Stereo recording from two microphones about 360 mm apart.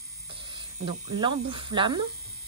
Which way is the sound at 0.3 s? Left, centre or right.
Centre.